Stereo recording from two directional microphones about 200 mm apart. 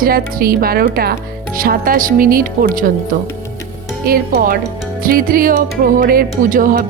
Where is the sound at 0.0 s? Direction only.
45° right (ahead or behind).